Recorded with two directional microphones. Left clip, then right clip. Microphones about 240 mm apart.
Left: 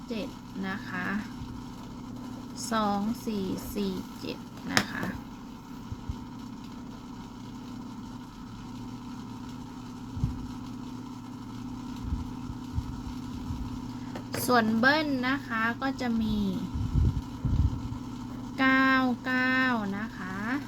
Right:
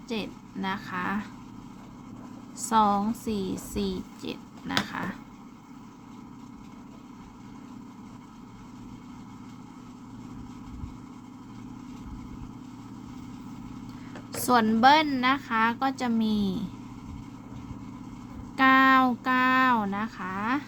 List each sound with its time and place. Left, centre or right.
0.1 s a woman's voice: right
2.6 s a woman's voice: centre
14.4 s a woman's voice: right
18.5 s speech: centre